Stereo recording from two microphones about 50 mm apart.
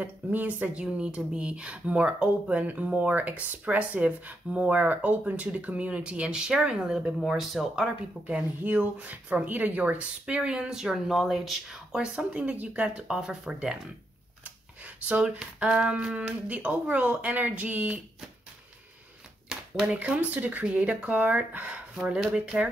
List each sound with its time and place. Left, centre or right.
0.0 s speech: right
0.8 s speech: centre
4.7 s speech: right
7.2 s speech: centre
8.3 s speech: right
10.2 s speech: centre
12.2 s speech: right
14.4 s a sound: right
15.6 s speech: right
19.9 s speech: right
22.3 s speech: right